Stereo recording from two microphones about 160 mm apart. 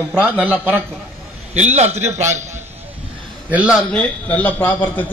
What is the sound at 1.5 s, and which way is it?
Speech, 45° right (ahead or behind).